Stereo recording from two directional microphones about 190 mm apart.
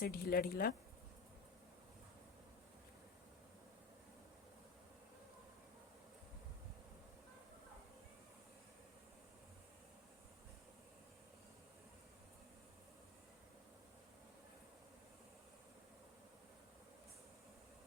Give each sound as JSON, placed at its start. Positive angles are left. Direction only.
{"t": 0.0, "sound": "speech", "side_deg": 55}